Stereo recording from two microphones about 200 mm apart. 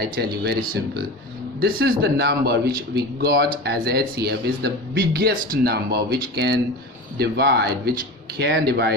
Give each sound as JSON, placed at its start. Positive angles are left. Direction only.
{"t": 0.2, "sound": "speech", "side_deg": -55}
{"t": 1.6, "sound": "speech", "side_deg": -55}